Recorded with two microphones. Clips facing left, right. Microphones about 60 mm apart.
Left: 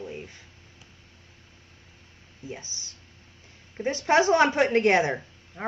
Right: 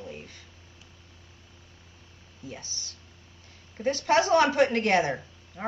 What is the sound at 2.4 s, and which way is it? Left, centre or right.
Speech, left.